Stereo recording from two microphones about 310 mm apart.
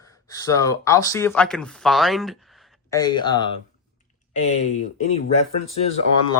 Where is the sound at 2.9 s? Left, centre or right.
Centre.